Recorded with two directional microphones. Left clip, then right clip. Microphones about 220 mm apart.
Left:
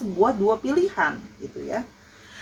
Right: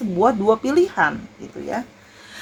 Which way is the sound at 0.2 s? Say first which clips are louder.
Right 3 dB; 45° right (ahead or behind).